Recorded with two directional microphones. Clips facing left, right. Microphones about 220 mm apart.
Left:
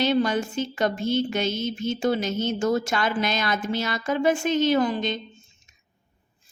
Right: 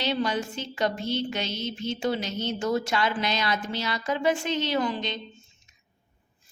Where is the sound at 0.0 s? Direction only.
50° left (ahead or behind).